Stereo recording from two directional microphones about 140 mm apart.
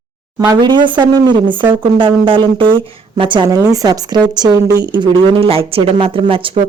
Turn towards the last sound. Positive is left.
turn(degrees=-40)  # may be behind; listen again after turning